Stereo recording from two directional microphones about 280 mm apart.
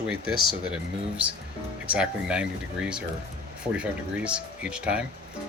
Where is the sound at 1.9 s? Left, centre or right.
Centre.